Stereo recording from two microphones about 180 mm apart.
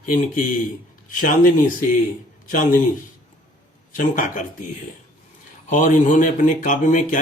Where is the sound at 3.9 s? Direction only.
45° left (ahead or behind).